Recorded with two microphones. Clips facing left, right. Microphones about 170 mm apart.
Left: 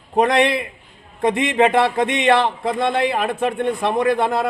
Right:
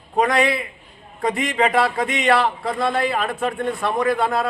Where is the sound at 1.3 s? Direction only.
25° left (ahead or behind).